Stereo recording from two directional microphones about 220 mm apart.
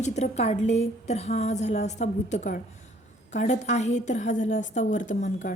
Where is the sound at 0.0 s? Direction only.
30° left (ahead or behind).